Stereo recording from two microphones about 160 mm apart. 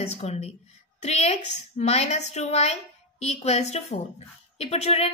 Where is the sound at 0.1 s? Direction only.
40° left (ahead or behind).